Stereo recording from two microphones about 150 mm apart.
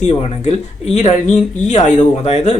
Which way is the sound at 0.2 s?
45° left (ahead or behind).